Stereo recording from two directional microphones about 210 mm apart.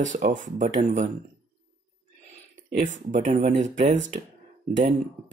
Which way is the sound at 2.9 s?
35° right (ahead or behind).